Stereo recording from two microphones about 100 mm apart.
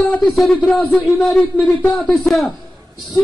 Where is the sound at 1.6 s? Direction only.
15° left (ahead or behind).